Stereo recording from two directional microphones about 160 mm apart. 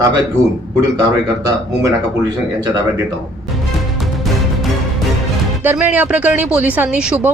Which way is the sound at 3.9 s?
Centre (ahead or behind).